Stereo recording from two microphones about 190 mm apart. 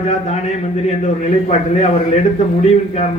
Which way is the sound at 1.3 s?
35° left (ahead or behind).